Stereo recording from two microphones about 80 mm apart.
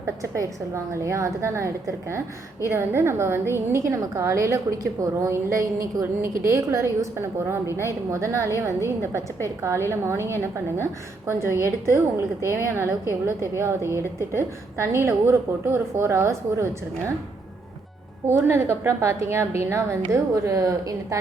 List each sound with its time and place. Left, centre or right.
0.0 s a woman's voice: right
18.3 s a woman's voice: right